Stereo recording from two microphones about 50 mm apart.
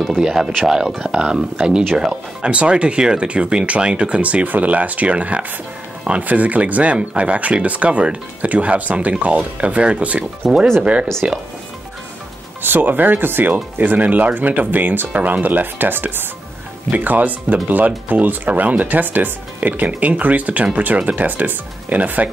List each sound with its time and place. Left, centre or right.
0.2 s speech: centre
12.6 s speech: right
13.7 s speech: right